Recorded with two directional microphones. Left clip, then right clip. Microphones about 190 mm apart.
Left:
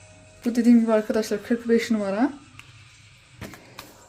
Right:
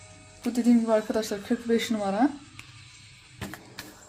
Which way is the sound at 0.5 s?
30° left (ahead or behind).